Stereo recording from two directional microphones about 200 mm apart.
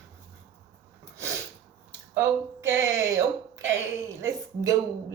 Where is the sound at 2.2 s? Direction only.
15° right (ahead or behind).